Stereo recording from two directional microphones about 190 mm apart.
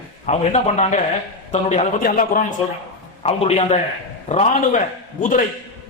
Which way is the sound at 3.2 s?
30° left (ahead or behind).